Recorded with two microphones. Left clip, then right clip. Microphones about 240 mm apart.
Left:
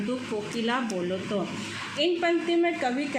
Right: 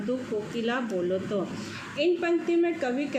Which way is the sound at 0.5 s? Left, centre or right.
Left.